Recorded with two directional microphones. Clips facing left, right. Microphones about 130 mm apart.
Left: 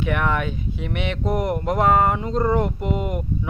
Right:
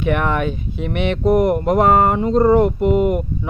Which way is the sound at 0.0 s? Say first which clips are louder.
Right 4 dB; 60° right (ahead or behind).